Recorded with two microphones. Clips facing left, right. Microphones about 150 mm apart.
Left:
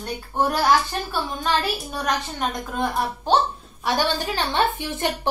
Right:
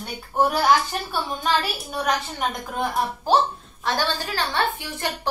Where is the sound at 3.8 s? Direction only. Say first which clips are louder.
Left 2 dB; 15° left (ahead or behind).